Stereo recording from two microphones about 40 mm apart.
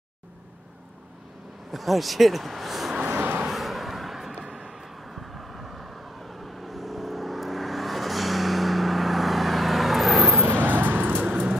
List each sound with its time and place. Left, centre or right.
1.7 s speech: centre
3.1 s vehicle: right
3.4 s a sound: centre
4.5 s vehicle: centre
10.5 s vehicle: right